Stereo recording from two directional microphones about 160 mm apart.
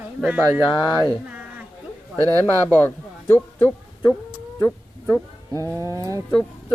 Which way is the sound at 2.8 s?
10° left (ahead or behind).